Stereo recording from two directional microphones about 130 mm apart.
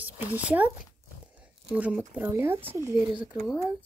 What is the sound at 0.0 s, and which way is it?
Speech, 10° right (ahead or behind).